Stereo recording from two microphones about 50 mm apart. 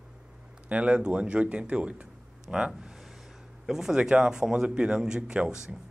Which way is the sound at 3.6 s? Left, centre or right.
Centre.